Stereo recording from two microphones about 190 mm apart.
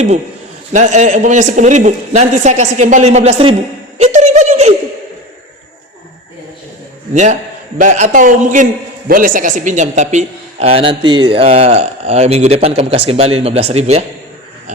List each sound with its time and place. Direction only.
0.7 s speech: 40° right (ahead or behind)
3.9 s a sound: 35° right (ahead or behind)
7.1 s a man's voice: 40° right (ahead or behind)